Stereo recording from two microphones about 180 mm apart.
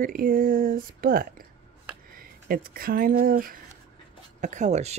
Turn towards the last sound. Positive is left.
turn(degrees=-40)  # may be behind; listen again after turning